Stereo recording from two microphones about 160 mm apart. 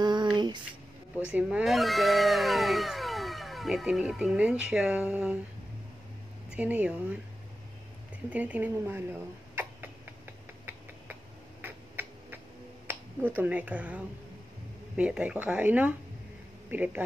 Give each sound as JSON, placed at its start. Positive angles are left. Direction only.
{"t": 0.0, "sound": "a sound", "side_deg": -25}
{"t": 1.3, "sound": "speech", "side_deg": -5}
{"t": 6.5, "sound": "speech", "side_deg": -10}
{"t": 8.3, "sound": "speech", "side_deg": -10}
{"t": 9.6, "sound": "a sound", "side_deg": -15}
{"t": 11.6, "sound": "tick-tock", "side_deg": -10}
{"t": 12.8, "sound": "speech", "side_deg": -10}